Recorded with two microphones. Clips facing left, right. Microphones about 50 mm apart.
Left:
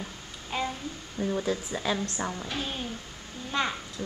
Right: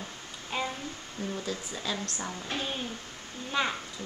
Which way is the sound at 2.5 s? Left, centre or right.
Centre.